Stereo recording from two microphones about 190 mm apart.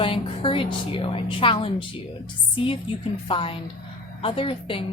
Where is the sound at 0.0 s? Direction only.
30° left (ahead or behind).